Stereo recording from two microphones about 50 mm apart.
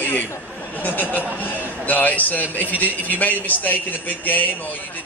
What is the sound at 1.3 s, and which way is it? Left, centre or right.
A man's voice, left.